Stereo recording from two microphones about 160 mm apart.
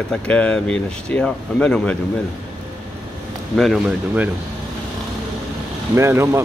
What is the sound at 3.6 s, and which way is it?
Speech, centre (ahead or behind).